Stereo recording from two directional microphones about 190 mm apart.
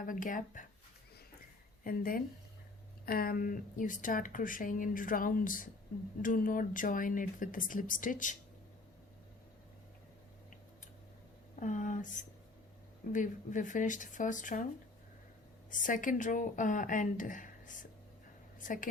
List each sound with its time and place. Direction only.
0.0 s a woman's voice: 45° left (ahead or behind)
1.8 s a woman's voice: 50° left (ahead or behind)
11.6 s a woman's voice: 40° left (ahead or behind)
13.1 s a woman's voice: 40° left (ahead or behind)
15.7 s a woman's voice: 45° left (ahead or behind)